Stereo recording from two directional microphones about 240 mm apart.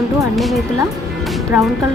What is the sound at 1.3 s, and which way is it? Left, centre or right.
Music, centre.